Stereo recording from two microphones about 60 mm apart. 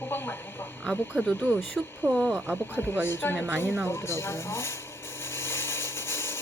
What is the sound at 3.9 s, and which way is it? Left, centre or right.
Speech, left.